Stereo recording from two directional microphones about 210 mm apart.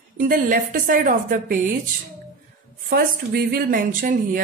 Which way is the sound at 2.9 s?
45° right (ahead or behind).